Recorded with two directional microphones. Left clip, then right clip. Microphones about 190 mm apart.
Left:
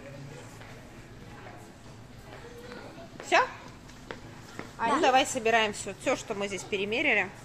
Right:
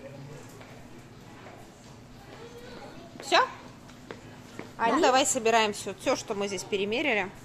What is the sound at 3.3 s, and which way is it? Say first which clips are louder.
Speech: right 1 dB; 15° right (ahead or behind).